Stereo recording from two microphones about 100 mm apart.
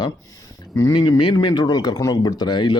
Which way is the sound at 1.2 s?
50° left (ahead or behind).